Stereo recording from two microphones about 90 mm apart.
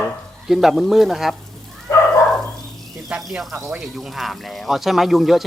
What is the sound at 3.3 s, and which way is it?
Speech, centre (ahead or behind).